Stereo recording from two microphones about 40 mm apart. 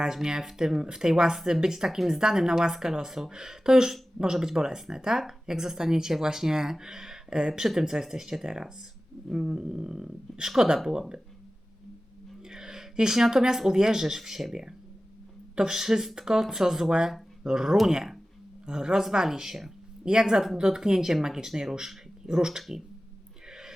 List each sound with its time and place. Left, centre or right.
0.0 s speech: centre
12.5 s speech: centre
15.5 s speech: centre
23.5 s a sound: centre